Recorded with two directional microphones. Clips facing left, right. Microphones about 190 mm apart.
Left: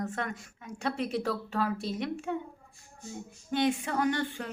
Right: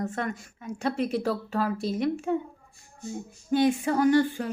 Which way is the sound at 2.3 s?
35° right (ahead or behind).